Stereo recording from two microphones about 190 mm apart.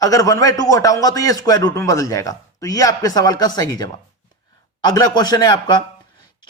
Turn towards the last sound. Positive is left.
turn(degrees=20)  # may be behind; listen again after turning